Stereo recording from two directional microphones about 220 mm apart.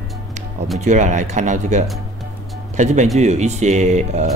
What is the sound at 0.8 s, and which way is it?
Speech, 35° right (ahead or behind).